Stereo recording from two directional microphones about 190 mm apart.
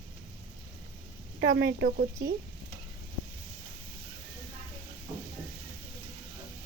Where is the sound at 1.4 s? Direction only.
70° right (ahead or behind).